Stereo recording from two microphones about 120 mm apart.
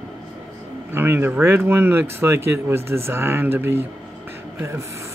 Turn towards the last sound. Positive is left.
turn(degrees=-25)  # may be behind; listen again after turning